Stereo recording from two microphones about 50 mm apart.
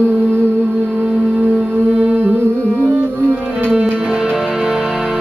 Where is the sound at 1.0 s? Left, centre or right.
Right.